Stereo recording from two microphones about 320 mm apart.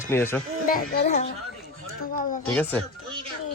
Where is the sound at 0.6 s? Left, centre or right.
Left.